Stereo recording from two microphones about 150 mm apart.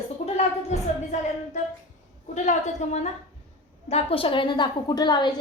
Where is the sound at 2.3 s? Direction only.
50° left (ahead or behind); by 5.3 s 30° left (ahead or behind).